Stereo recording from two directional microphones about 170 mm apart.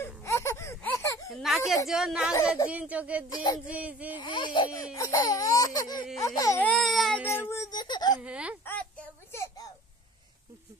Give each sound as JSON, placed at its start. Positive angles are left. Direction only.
{"t": 0.2, "sound": "baby cry", "side_deg": 15}
{"t": 1.3, "sound": "speech", "side_deg": 0}
{"t": 1.9, "sound": "child singing", "side_deg": 0}
{"t": 2.5, "sound": "speech", "side_deg": -10}
{"t": 3.3, "sound": "baby cry", "side_deg": 25}
{"t": 3.6, "sound": "speech", "side_deg": -10}
{"t": 4.2, "sound": "baby cry", "side_deg": 30}
{"t": 6.6, "sound": "child singing", "side_deg": 5}
{"t": 7.4, "sound": "crying", "side_deg": 20}
{"t": 8.2, "sound": "speech", "side_deg": -5}
{"t": 8.6, "sound": "a sound", "side_deg": 10}